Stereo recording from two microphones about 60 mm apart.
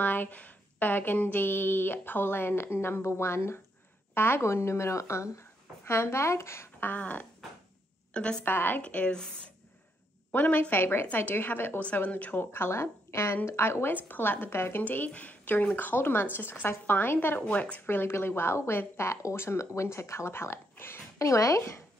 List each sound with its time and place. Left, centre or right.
0.0 s speech: left
6.8 s a woman's voice: left
8.5 s speech: left
8.8 s speech: centre
10.7 s speech: left
12.5 s speech: left
14.8 s speech: left
17.5 s speech: left
17.7 s speech: left
21.2 s speech: left